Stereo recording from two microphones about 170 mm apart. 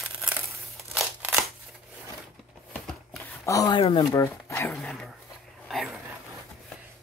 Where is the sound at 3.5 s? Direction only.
25° left (ahead or behind).